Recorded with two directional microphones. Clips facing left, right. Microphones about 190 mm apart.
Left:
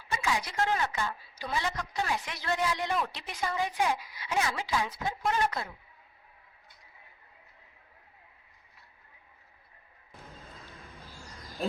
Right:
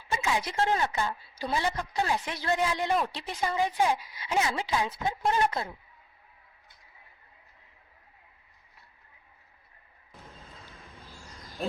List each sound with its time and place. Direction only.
0.1 s a woman's voice: 25° right (ahead or behind)
11.6 s speech: centre (ahead or behind)